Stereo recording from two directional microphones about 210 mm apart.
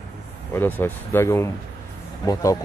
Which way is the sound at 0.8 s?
10° left (ahead or behind).